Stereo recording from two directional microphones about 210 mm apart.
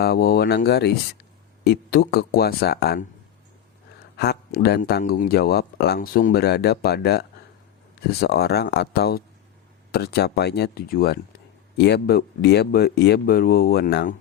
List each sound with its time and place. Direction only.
0.0 s speech: 45° left (ahead or behind)
4.2 s speech: 50° left (ahead or behind)